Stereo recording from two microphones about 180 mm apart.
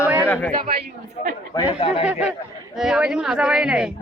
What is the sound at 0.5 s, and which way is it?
Speech, 55° right (ahead or behind).